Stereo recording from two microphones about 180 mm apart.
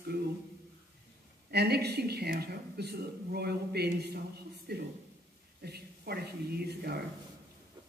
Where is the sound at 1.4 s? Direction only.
65° right (ahead or behind).